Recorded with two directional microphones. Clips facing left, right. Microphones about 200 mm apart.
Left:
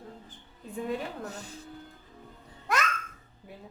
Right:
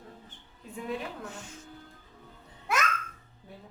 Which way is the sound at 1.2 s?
35° left (ahead or behind).